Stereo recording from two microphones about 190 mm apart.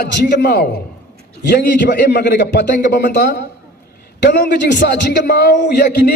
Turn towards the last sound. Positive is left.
turn(degrees=60)  # may be behind; listen again after turning